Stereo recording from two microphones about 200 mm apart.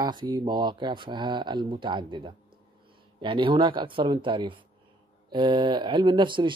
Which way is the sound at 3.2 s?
25° right (ahead or behind).